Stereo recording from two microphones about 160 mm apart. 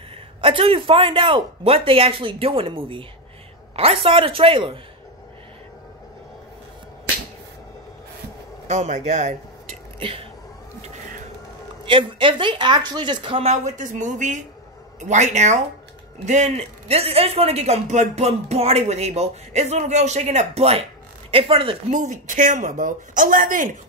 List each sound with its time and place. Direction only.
0.4 s speech: 35° right (ahead or behind)
8.6 s a man's voice: 45° right (ahead or behind)
9.9 s speech: 35° right (ahead or behind)
11.8 s a man's voice: 30° right (ahead or behind)
21.9 s a man's voice: 50° right (ahead or behind)